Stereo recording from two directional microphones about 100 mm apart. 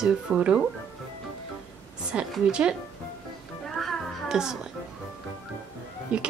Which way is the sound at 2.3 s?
10° right (ahead or behind).